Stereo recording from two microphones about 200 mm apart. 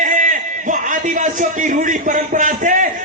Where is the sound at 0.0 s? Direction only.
40° right (ahead or behind).